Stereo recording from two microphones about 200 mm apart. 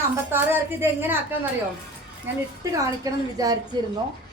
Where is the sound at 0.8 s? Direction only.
10° right (ahead or behind).